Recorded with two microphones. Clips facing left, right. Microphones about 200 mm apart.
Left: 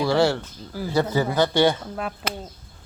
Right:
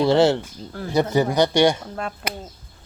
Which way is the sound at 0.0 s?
20° right (ahead or behind).